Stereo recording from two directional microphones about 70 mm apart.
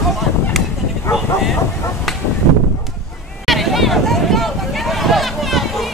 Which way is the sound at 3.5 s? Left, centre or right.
Centre.